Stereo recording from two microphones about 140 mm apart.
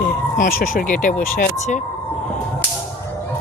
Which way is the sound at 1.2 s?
90° left.